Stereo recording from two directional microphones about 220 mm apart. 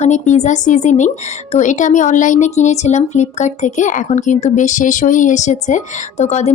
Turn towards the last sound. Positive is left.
turn(degrees=30)  # may be behind; listen again after turning